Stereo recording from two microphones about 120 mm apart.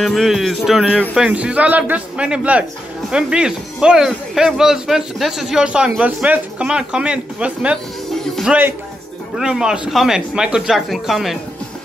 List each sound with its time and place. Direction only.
0.0 s speech: centre (ahead or behind)
0.8 s speech: 10° left (ahead or behind)
1.1 s speech: 10° right (ahead or behind)